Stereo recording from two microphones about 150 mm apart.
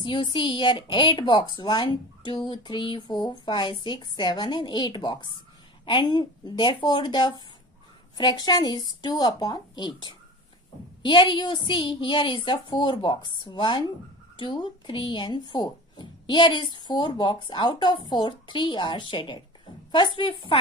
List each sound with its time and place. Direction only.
0.0 s a woman's voice: 30° left (ahead or behind)